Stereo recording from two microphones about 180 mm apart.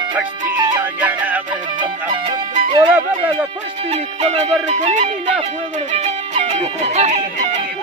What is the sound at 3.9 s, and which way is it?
Music, 40° right (ahead or behind).